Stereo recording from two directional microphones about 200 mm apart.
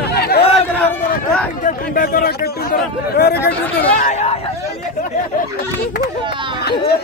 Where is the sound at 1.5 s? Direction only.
45° left (ahead or behind).